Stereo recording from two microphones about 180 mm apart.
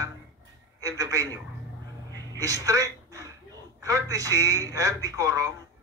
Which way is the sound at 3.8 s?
20° right (ahead or behind).